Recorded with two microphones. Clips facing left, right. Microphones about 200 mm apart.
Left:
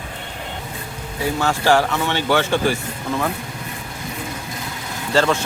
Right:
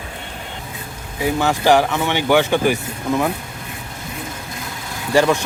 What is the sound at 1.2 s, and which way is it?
Speech, 15° right (ahead or behind).